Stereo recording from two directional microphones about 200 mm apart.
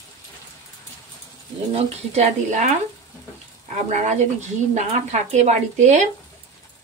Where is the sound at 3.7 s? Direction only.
35° right (ahead or behind).